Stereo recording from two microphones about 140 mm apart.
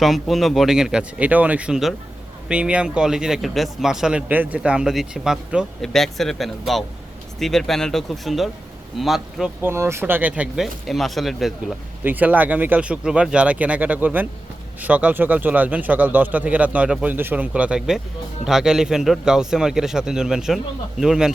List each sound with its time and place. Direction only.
0.0 s speech: centre (ahead or behind)
9.6 s a man's voice: 15° right (ahead or behind)
10.8 s speech: centre (ahead or behind)
12.0 s a man's voice: 10° right (ahead or behind)